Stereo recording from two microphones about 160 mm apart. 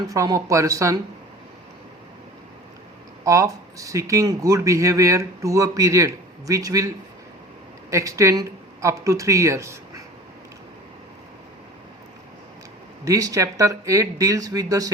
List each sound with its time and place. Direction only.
0.1 s speech: 20° right (ahead or behind)
3.2 s speech: 20° right (ahead or behind)
13.1 s speech: 20° right (ahead or behind)